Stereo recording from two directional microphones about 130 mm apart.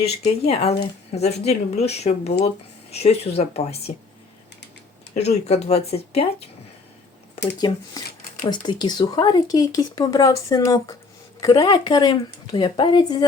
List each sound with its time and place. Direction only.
0.0 s speech: 50° left (ahead or behind)
5.1 s speech: 55° left (ahead or behind)
8.4 s speech: 35° left (ahead or behind)